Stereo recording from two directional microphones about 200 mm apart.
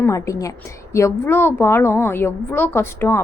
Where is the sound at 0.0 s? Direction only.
15° left (ahead or behind).